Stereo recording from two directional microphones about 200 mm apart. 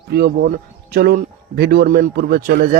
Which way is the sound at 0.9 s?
50° right (ahead or behind).